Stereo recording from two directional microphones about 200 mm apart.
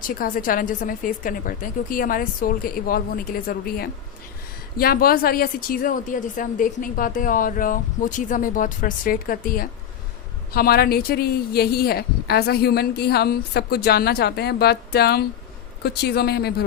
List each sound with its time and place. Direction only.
0.1 s a woman's voice: 45° left (ahead or behind)